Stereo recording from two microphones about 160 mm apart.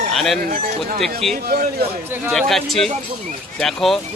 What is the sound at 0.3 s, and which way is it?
Speech, 65° right (ahead or behind).